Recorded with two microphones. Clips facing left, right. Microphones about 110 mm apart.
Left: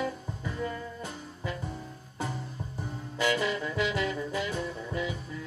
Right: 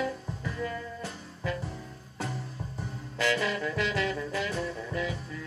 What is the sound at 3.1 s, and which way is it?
Music, 15° left (ahead or behind).